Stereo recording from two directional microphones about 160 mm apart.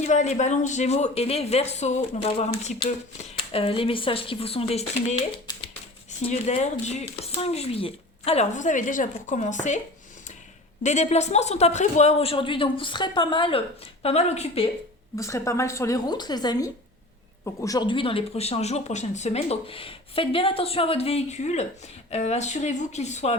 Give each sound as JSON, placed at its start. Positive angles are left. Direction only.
{"t": 0.0, "sound": "speech", "side_deg": 45}
{"t": 6.1, "sound": "speech", "side_deg": 45}
{"t": 10.8, "sound": "speech", "side_deg": 45}
{"t": 15.1, "sound": "a woman's voice", "side_deg": 20}